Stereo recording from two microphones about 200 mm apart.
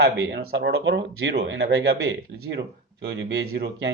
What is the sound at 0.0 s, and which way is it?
Speech, 55° right (ahead or behind).